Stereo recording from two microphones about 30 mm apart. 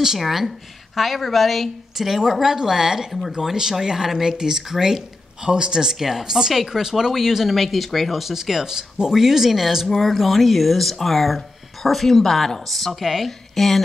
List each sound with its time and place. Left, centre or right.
0.2 s speech: centre
2.0 s speech: centre
5.4 s speech: right
5.9 s speech: centre
8.2 s speech: centre
13.0 s speech: centre
13.6 s speech: centre